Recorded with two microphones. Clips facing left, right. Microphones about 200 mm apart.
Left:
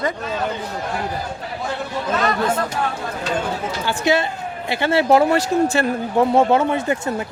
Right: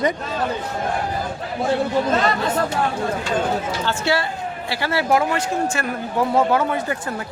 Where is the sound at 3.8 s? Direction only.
20° left (ahead or behind).